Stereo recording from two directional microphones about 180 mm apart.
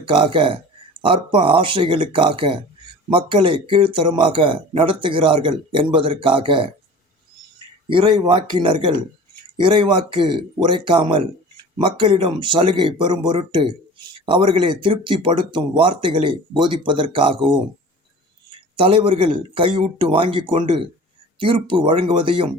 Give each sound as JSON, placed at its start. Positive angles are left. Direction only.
{"t": 0.0, "sound": "speech", "side_deg": -30}
{"t": 7.9, "sound": "speech", "side_deg": -25}
{"t": 18.8, "sound": "speech", "side_deg": -30}